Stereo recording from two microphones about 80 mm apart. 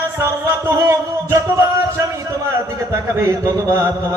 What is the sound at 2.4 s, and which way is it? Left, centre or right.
Speech, right.